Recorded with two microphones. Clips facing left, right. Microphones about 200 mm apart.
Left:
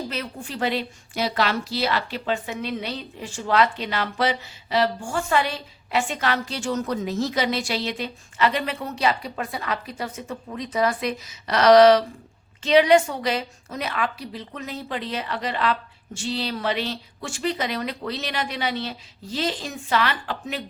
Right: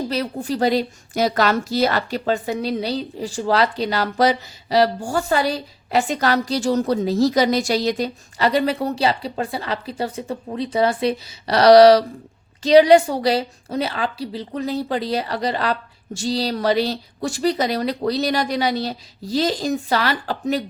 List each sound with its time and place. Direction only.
0.1 s a woman's voice: 40° right (ahead or behind)